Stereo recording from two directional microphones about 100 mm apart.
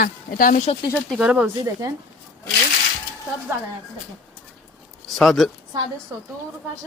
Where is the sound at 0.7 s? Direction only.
90° left.